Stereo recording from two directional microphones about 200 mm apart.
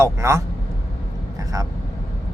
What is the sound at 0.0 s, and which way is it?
Speech, 15° right (ahead or behind).